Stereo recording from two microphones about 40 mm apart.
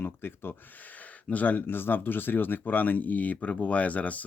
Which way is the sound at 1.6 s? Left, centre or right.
Left.